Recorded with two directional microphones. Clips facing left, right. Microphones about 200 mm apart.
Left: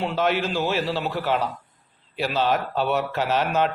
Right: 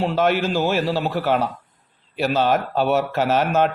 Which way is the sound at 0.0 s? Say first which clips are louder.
Right 4 dB; 45° right (ahead or behind).